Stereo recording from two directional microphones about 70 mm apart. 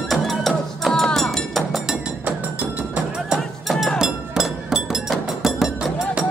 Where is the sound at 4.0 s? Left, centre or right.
Centre.